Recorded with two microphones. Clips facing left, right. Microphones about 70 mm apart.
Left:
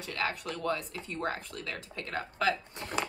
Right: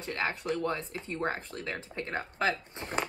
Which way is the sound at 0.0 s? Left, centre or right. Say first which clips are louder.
Right 1 dB; right.